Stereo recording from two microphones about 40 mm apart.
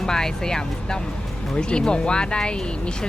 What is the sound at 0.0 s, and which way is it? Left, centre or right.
Speech, centre.